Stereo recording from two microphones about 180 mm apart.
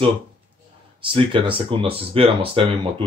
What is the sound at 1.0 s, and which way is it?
Speech, 30° right (ahead or behind).